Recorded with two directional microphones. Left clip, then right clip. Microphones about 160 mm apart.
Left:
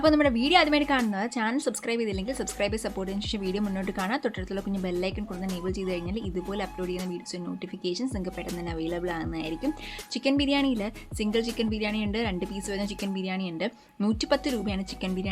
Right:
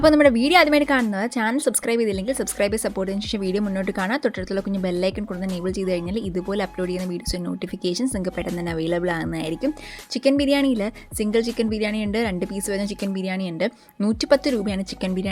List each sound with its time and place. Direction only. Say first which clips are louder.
0.0 s a woman's voice: right 7 dB; 40° right (ahead or behind)